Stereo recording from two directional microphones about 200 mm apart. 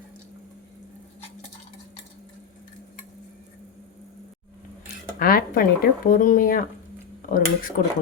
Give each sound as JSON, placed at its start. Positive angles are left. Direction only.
{"t": 5.2, "sound": "speech", "side_deg": 45}